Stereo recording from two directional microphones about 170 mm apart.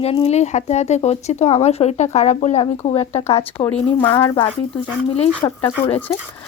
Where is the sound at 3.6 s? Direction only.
10° left (ahead or behind).